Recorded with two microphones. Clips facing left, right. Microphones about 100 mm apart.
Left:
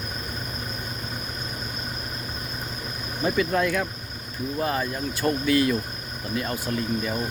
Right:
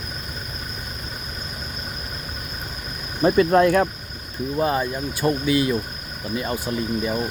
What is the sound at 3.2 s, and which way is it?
Speech, 45° right (ahead or behind).